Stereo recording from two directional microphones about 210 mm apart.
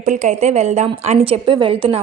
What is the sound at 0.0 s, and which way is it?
A woman's voice, 35° right (ahead or behind).